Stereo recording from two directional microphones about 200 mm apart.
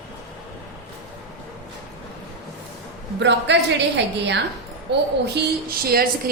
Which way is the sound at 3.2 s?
60° right (ahead or behind).